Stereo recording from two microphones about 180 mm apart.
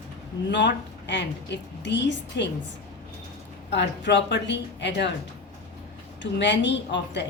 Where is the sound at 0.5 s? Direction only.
75° left (ahead or behind).